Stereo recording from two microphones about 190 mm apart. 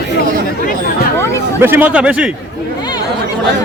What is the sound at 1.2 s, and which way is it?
Speech, 15° left (ahead or behind).